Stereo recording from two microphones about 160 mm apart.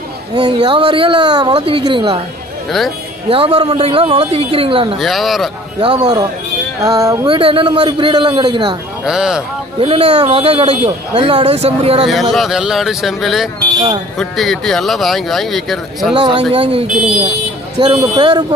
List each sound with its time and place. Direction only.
0.3 s speech: 25° right (ahead or behind)
3.3 s speech: 35° right (ahead or behind)
4.9 s speech: centre (ahead or behind)
5.8 s speech: 30° right (ahead or behind)
7.2 s speech: 35° right (ahead or behind)
9.0 s speech: 5° right (ahead or behind)
9.8 s speech: 35° right (ahead or behind)
12.1 s speech: centre (ahead or behind)
16.2 s speech: 30° right (ahead or behind)
17.7 s speech: 25° right (ahead or behind)